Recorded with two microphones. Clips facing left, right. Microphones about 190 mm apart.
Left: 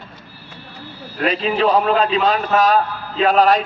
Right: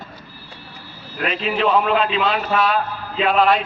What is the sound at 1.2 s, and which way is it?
A man's voice, 35° left (ahead or behind).